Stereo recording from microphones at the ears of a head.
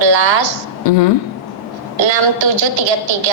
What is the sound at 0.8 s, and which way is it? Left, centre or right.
Speech, left.